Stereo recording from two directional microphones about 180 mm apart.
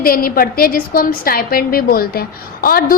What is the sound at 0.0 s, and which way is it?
A woman's voice, 55° left (ahead or behind).